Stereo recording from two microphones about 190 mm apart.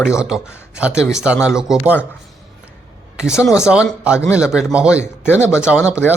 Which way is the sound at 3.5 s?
5° right (ahead or behind).